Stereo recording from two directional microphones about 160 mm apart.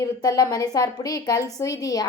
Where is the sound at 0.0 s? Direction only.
25° left (ahead or behind).